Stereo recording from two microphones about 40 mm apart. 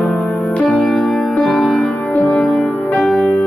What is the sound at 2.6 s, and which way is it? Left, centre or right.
Music, left.